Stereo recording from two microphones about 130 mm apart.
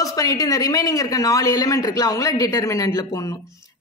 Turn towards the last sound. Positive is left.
turn(degrees=25)  # may be behind; listen again after turning